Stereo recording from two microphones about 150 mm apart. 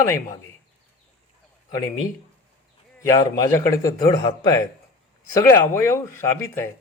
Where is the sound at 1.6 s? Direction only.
25° left (ahead or behind).